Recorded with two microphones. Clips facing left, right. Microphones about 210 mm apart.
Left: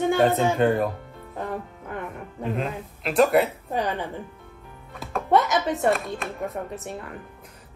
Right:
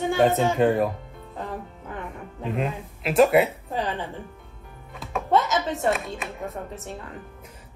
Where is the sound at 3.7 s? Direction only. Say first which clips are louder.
Left 2 dB; 15° left (ahead or behind).